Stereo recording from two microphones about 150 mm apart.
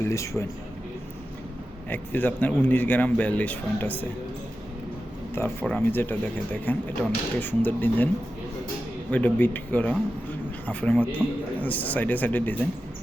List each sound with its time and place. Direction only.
0.0 s a man's voice: 20° left (ahead or behind)
1.9 s speech: 10° left (ahead or behind)
5.3 s speech: 15° left (ahead or behind)